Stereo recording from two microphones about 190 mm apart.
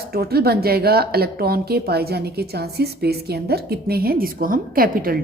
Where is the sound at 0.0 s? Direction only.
55° right (ahead or behind).